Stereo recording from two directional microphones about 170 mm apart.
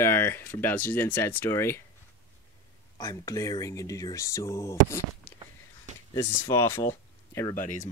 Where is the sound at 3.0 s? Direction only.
20° left (ahead or behind).